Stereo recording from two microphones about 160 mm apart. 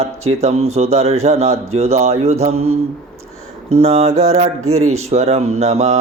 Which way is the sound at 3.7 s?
40° right (ahead or behind).